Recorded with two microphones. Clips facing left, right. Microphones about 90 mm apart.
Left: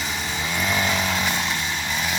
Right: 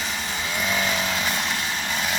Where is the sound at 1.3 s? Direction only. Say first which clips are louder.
Left 1 dB; centre (ahead or behind).